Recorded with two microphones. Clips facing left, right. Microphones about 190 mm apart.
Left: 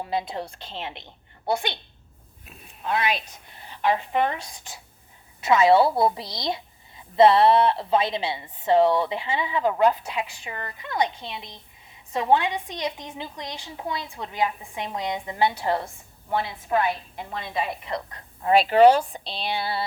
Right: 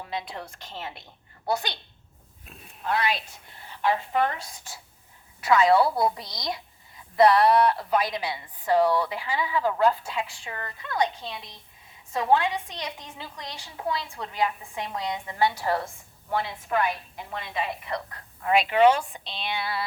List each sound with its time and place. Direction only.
0.3 s a woman's voice: 30° left (ahead or behind)
2.4 s a sound: 5° left (ahead or behind)
2.8 s a woman's voice: 20° left (ahead or behind)
17.3 s a woman's voice: 25° left (ahead or behind)